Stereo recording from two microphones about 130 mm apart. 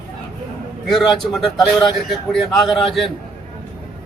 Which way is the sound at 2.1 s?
Centre (ahead or behind).